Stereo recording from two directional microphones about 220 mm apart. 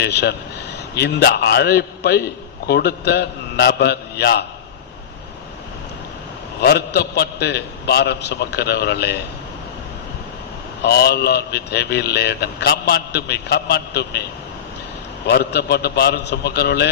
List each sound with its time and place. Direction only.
0.0 s a man's voice: 50° left (ahead or behind)
6.6 s a man's voice: 45° left (ahead or behind)
10.8 s a man's voice: 45° left (ahead or behind)
15.3 s a man's voice: 50° left (ahead or behind)